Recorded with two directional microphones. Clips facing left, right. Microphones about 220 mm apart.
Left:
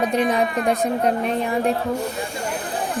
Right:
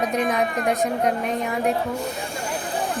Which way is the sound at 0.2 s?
30° left (ahead or behind).